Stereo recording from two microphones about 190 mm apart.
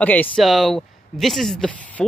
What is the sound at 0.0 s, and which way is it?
Speech, 10° left (ahead or behind).